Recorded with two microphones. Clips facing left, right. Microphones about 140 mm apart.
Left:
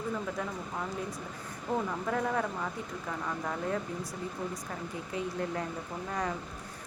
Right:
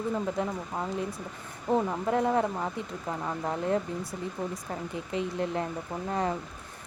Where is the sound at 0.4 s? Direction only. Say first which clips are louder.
Right 6 dB; 25° right (ahead or behind).